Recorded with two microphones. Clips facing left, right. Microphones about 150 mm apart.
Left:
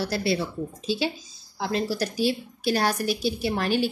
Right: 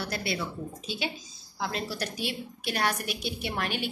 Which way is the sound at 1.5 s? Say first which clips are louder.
Left 6 dB; 30° left (ahead or behind).